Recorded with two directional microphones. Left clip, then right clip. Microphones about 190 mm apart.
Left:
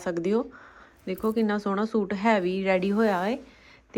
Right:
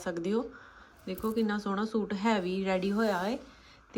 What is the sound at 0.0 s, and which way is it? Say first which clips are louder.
Speech: left 6 dB; 10° right (ahead or behind).